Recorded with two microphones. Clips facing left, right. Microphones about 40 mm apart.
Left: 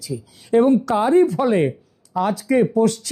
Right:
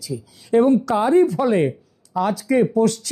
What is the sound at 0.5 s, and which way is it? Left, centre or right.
Speech, centre.